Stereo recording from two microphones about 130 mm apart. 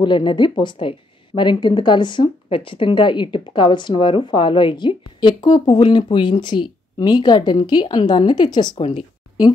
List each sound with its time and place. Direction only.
0.0 s a woman's voice: 40° left (ahead or behind)